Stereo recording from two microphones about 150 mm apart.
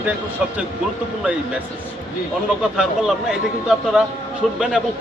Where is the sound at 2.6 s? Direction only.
5° right (ahead or behind).